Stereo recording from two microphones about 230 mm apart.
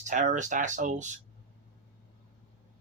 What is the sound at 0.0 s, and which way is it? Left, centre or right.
Speech, right.